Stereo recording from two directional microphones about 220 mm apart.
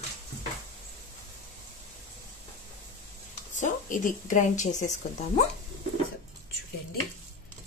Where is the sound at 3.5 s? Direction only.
35° left (ahead or behind).